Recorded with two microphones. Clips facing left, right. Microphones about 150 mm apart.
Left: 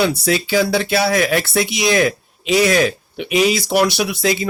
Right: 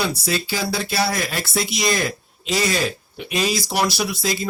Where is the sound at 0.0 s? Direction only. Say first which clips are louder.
Left 6 dB; 75° left (ahead or behind).